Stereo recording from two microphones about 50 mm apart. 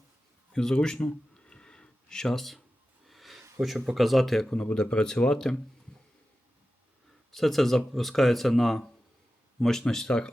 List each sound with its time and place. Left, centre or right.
0.5 s a sound: centre
3.6 s speech: centre
4.4 s speech: centre
7.3 s speech: centre